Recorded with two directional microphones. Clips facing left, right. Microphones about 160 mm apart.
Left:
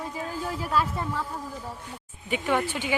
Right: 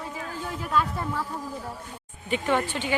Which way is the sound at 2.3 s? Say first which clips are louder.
Right 1 dB; 10° left (ahead or behind).